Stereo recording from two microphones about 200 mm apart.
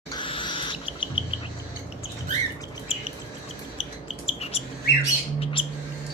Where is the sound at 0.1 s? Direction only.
25° left (ahead or behind).